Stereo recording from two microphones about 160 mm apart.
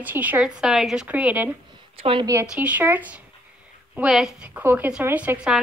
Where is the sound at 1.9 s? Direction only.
35° right (ahead or behind).